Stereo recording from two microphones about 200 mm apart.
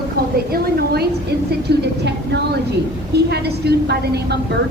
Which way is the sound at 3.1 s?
55° right (ahead or behind).